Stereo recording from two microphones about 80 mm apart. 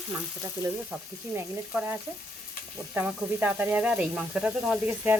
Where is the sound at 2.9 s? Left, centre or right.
Right.